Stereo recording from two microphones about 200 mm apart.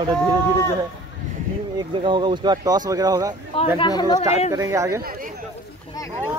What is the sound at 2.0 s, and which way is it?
Speech, 25° right (ahead or behind).